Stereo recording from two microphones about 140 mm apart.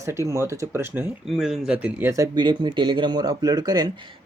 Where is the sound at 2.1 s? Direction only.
25° right (ahead or behind).